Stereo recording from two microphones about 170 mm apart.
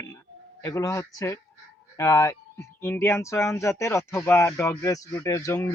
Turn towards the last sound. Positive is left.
turn(degrees=15)  # may be behind; listen again after turning